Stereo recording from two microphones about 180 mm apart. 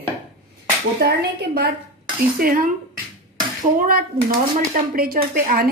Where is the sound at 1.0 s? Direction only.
60° right (ahead or behind).